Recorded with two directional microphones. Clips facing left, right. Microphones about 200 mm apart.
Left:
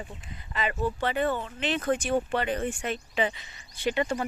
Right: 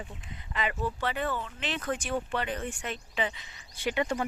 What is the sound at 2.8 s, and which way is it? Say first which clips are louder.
Speech: left 4 dB; 50° left (ahead or behind).